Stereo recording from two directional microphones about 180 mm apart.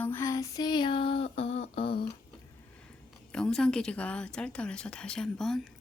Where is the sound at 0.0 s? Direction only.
15° left (ahead or behind); by 2.0 s 30° left (ahead or behind).